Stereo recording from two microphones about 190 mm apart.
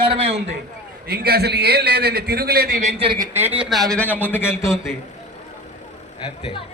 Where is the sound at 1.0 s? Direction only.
55° right (ahead or behind).